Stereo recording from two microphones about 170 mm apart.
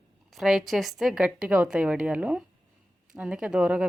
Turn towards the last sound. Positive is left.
turn(degrees=-5)  # may be behind; listen again after turning